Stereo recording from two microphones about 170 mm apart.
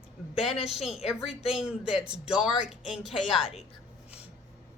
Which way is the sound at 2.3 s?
5° right (ahead or behind).